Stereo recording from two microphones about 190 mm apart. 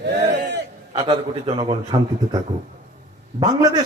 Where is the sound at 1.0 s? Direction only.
25° right (ahead or behind).